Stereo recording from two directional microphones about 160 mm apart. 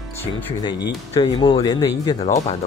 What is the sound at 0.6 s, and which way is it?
Speech, 30° left (ahead or behind).